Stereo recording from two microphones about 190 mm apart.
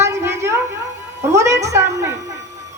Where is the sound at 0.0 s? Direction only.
15° right (ahead or behind).